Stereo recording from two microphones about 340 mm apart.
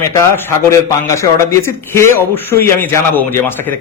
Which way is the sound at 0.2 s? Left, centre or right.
Centre.